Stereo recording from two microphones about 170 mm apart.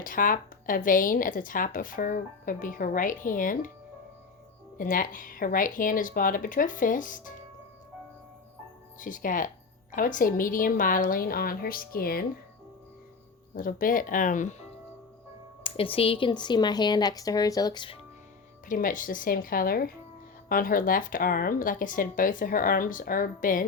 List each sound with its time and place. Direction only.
0.0 s a woman's voice: 55° left (ahead or behind)
4.8 s a woman's voice: 55° left (ahead or behind)
9.0 s a woman's voice: 50° left (ahead or behind)
13.6 s a woman's voice: 55° left (ahead or behind)
15.6 s speech: 30° left (ahead or behind)
18.7 s a woman's voice: 50° left (ahead or behind)